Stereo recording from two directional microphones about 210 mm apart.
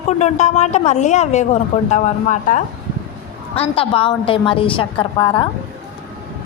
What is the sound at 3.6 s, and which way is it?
A woman's voice, 25° left (ahead or behind).